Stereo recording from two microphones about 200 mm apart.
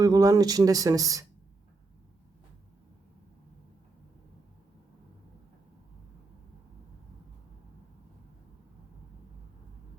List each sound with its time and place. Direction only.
0.0 s speech: 15° right (ahead or behind)